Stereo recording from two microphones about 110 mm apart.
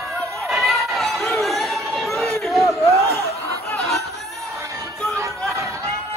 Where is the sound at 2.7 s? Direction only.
25° left (ahead or behind).